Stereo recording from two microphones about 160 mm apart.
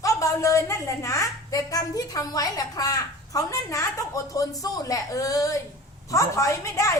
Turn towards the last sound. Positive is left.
turn(degrees=20)  # may be behind; listen again after turning